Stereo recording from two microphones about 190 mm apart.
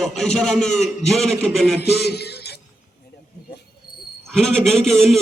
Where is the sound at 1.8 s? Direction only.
60° left (ahead or behind).